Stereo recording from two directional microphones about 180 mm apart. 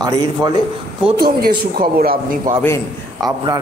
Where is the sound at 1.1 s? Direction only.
55° right (ahead or behind).